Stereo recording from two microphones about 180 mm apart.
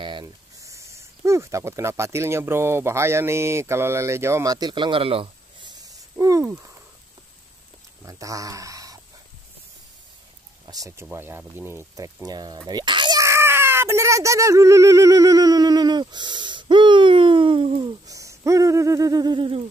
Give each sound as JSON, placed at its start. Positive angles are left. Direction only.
{"t": 0.0, "sound": "speech", "side_deg": -25}
{"t": 8.0, "sound": "speech", "side_deg": -20}
{"t": 10.6, "sound": "speech", "side_deg": -20}